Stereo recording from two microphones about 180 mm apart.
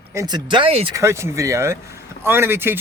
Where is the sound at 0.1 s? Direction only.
20° right (ahead or behind).